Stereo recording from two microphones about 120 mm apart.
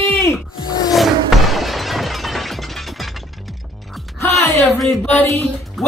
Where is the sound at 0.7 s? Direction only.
35° left (ahead or behind).